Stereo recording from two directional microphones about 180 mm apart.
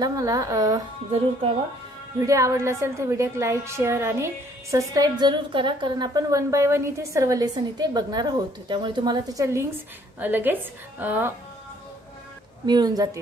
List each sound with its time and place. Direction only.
0.0 s a woman's voice: 20° right (ahead or behind)
2.1 s a woman's voice: 15° right (ahead or behind)
12.6 s a woman's voice: 20° right (ahead or behind)